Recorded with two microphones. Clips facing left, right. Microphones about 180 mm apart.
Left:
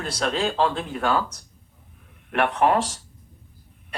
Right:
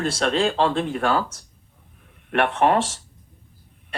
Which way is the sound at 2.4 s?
30° right (ahead or behind).